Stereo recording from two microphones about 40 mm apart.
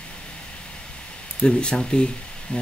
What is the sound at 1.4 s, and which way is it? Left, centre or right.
Speech, left.